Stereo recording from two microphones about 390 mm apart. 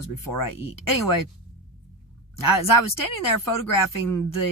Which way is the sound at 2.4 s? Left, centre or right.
Left.